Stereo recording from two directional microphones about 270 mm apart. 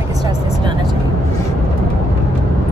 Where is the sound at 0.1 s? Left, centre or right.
Centre.